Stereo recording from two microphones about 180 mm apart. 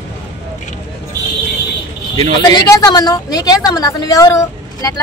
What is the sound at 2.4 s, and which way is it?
A woman's voice, 20° left (ahead or behind).